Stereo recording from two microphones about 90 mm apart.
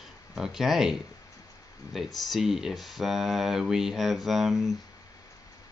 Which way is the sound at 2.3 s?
5° right (ahead or behind).